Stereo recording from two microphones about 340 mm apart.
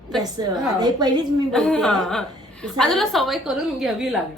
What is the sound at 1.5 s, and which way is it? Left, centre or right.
A woman's voice, centre.